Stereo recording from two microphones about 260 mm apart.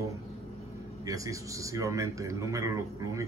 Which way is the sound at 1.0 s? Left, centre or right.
Centre.